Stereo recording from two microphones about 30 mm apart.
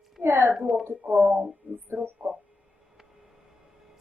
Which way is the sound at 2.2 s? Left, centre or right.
Right.